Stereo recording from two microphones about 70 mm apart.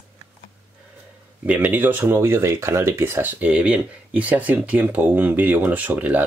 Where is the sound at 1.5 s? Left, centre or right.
Right.